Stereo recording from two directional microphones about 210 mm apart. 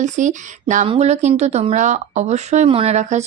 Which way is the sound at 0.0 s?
35° right (ahead or behind).